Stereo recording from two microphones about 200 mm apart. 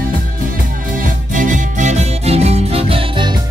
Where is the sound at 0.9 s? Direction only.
40° right (ahead or behind).